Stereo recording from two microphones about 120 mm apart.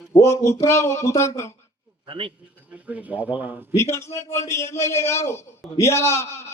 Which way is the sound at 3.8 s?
25° left (ahead or behind).